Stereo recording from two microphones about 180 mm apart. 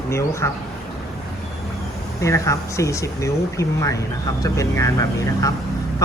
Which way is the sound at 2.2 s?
15° left (ahead or behind).